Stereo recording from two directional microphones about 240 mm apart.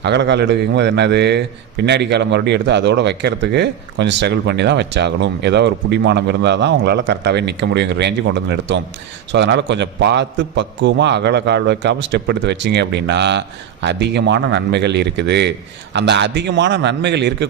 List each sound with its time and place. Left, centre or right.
0.0 s a man's voice: right